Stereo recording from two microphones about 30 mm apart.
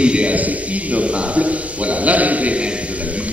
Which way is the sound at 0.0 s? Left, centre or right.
Right.